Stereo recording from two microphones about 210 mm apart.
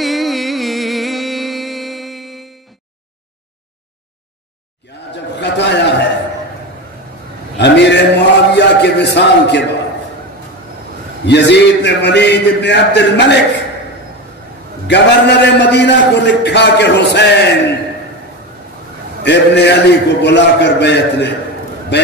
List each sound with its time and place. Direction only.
0.0 s music: centre (ahead or behind)
5.4 s a sound: 55° left (ahead or behind)
7.5 s a sound: 55° left (ahead or behind)
11.2 s a man's voice: 55° left (ahead or behind)
14.9 s a man's voice: 55° left (ahead or behind)
19.2 s a man's voice: 55° left (ahead or behind)